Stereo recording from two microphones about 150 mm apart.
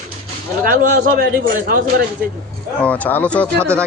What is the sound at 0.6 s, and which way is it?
A man's voice, 65° right (ahead or behind).